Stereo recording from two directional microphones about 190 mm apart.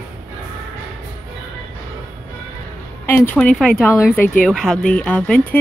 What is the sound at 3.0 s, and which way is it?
Speech, 10° left (ahead or behind).